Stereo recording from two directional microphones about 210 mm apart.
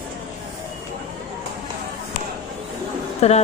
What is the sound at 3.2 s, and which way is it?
Speech, 30° left (ahead or behind).